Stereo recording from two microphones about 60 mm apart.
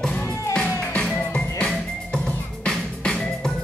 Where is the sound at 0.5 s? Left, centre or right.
Centre.